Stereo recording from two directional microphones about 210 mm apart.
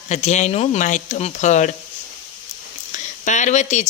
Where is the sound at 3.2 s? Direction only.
35° left (ahead or behind).